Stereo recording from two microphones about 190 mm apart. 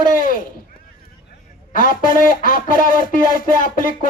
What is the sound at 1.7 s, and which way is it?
Speech, 45° left (ahead or behind).